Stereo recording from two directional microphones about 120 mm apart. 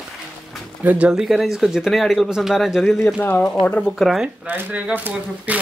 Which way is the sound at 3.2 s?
15° left (ahead or behind).